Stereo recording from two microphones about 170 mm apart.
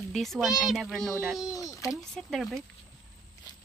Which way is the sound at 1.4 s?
20° left (ahead or behind).